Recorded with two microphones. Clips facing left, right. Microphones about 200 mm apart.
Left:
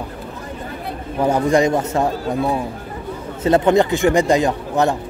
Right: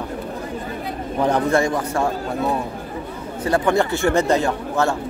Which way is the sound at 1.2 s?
10° left (ahead or behind).